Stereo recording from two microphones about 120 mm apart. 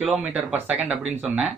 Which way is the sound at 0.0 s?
10° right (ahead or behind).